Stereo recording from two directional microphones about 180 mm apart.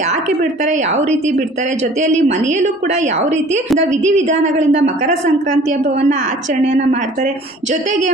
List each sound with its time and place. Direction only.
0.6 s speech: 40° right (ahead or behind)